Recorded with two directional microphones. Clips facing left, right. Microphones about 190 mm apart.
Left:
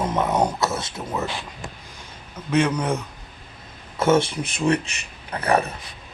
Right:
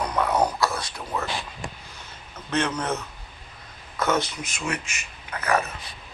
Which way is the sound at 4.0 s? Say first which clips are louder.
Left 6 dB; 25° left (ahead or behind).